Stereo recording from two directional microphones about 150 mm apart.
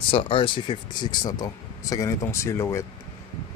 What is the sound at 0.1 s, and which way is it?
Speech, 35° left (ahead or behind).